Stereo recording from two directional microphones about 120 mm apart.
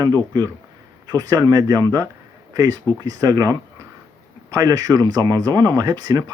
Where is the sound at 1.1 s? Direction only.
30° right (ahead or behind).